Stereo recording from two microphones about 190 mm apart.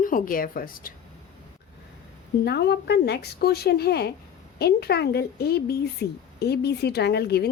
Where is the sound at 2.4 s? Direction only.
60° left (ahead or behind).